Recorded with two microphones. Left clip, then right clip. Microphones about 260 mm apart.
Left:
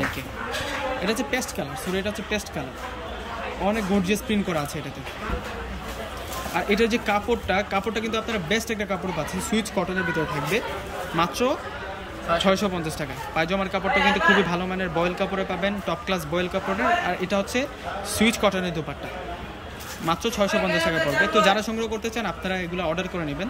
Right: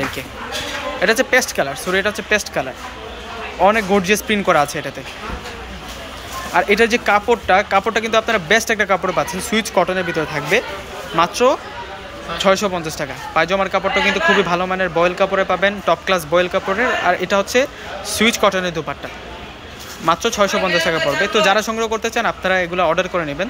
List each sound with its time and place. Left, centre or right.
1.0 s speech: centre
3.6 s speech: centre
6.5 s speech: centre
20.1 s speech: centre